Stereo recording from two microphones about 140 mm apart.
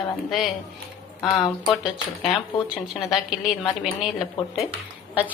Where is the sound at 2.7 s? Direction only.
5° right (ahead or behind).